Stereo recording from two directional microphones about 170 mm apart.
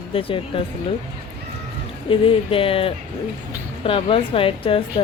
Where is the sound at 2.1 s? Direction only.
30° left (ahead or behind).